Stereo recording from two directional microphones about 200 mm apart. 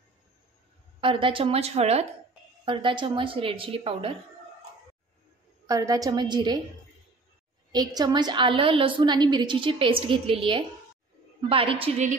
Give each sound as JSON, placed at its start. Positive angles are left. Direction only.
{"t": 1.0, "sound": "a woman's voice", "side_deg": -25}
{"t": 5.7, "sound": "a woman's voice", "side_deg": -15}
{"t": 7.7, "sound": "a woman's voice", "side_deg": -20}